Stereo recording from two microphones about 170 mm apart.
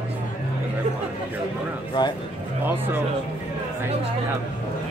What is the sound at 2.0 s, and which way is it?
Speech, 25° left (ahead or behind).